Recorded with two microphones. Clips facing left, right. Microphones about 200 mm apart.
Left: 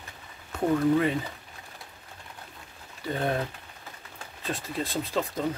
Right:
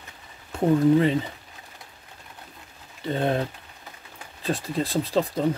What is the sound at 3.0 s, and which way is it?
Speech, 25° right (ahead or behind).